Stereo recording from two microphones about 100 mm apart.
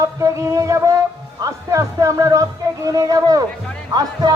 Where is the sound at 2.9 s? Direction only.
35° right (ahead or behind).